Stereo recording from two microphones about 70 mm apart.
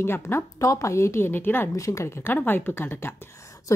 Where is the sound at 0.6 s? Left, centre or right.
Left.